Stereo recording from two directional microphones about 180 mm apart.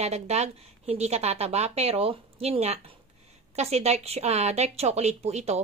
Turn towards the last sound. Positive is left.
turn(degrees=-35)  # may be behind; listen again after turning